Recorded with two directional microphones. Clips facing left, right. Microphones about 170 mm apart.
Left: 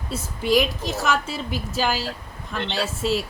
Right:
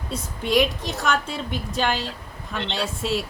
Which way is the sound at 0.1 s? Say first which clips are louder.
Left 2 dB; centre (ahead or behind).